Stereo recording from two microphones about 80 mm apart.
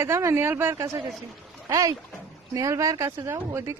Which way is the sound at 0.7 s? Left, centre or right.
Right.